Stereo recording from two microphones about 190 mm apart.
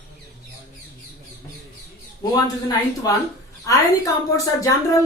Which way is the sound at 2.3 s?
20° left (ahead or behind).